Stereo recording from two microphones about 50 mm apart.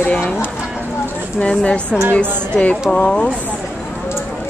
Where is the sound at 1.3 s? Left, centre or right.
Left.